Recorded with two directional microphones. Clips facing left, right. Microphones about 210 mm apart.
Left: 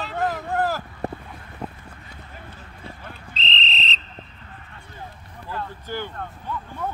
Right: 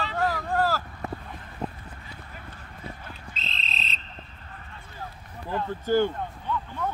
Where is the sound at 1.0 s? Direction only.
35° left (ahead or behind).